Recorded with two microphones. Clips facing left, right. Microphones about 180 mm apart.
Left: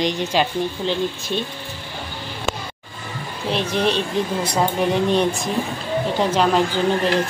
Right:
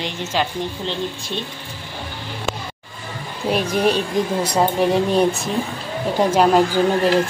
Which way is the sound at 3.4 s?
10° right (ahead or behind).